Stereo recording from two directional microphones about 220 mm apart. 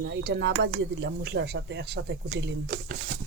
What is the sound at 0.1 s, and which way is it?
Speech, 50° right (ahead or behind).